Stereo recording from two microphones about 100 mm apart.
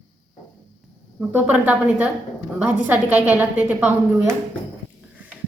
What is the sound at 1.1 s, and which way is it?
A woman's voice, 15° right (ahead or behind).